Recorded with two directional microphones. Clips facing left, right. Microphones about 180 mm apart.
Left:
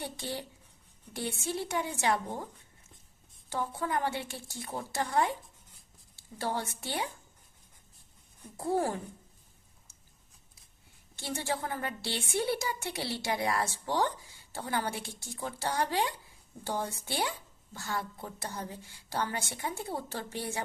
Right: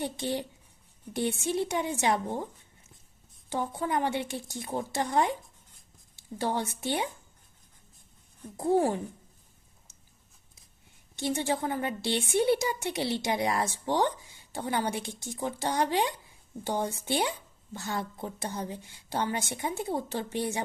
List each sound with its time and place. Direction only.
0.0 s a woman's voice: 20° right (ahead or behind)
3.5 s a woman's voice: 20° right (ahead or behind)
8.5 s a woman's voice: 20° right (ahead or behind)
11.2 s a woman's voice: 20° right (ahead or behind)